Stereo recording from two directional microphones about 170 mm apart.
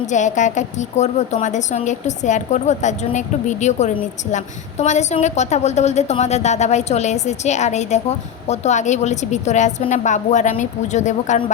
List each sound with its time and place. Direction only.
0.0 s a woman's voice: 45° left (ahead or behind)